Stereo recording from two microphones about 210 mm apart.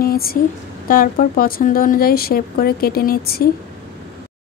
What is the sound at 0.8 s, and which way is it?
Speech, 40° left (ahead or behind).